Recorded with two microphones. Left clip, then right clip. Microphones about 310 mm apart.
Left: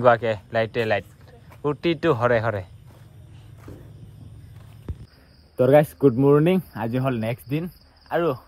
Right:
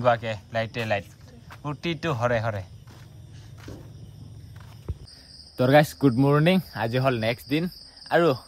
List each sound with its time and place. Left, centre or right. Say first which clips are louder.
0.0 s speech: left 5 dB; centre
5.6 s speech: left 3 dB; right